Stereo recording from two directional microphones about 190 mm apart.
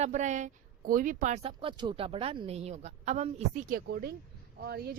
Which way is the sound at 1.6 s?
25° right (ahead or behind).